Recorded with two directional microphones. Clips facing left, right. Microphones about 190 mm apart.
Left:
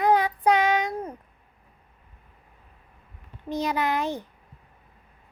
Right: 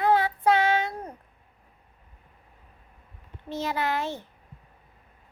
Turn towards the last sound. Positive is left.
turn(degrees=15)  # may be behind; listen again after turning